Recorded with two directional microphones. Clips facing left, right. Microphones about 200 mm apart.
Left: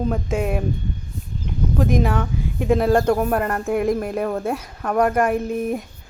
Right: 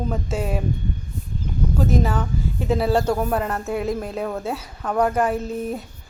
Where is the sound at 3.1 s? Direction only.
5° left (ahead or behind).